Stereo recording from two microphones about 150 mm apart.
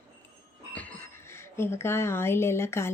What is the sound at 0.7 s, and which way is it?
A woman's voice, 15° left (ahead or behind).